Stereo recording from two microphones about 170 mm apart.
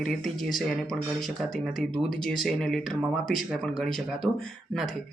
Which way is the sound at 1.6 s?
Centre (ahead or behind).